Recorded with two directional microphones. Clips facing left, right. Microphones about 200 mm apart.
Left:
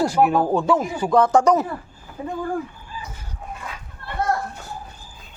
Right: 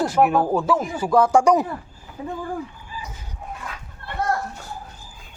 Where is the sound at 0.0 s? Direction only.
Centre (ahead or behind).